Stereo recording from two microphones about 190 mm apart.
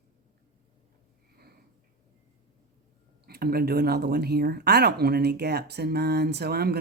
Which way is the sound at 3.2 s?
55° right (ahead or behind).